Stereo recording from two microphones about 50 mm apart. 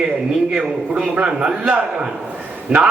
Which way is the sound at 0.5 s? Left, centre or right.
Centre.